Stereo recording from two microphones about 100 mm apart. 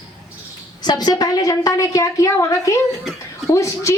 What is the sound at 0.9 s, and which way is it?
A woman's voice, 40° left (ahead or behind).